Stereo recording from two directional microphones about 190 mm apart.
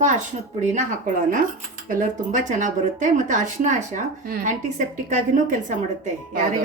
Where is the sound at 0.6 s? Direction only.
40° right (ahead or behind).